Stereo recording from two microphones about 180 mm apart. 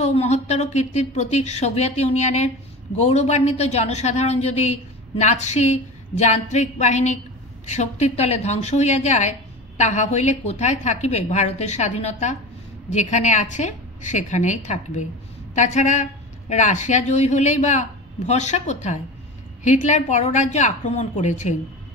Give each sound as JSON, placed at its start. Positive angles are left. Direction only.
{"t": 0.0, "sound": "speech", "side_deg": 40}